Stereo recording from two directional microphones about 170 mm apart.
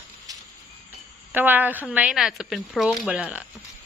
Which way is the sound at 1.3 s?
10° right (ahead or behind).